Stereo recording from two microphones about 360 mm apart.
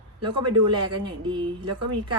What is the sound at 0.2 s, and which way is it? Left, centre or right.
Speech, centre.